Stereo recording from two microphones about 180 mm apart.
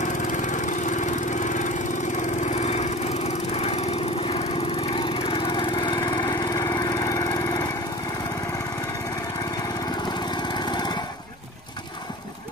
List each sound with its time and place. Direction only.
0.0 s lawn mower: 45° left (ahead or behind)
2.5 s vehicle: 40° left (ahead or behind)
4.9 s vehicle: 30° left (ahead or behind)
10.3 s lawn mower: 25° left (ahead or behind)